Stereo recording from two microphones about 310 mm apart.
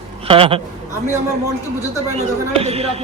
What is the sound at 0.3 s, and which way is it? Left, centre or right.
Speech, centre.